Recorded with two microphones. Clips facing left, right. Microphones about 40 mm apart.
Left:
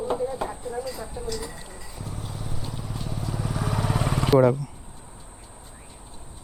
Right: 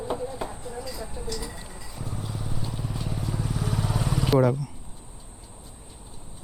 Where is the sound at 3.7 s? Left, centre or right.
Left.